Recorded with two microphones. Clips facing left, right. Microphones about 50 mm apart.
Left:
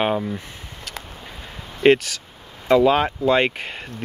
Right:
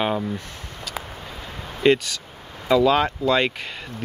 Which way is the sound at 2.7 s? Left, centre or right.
Left.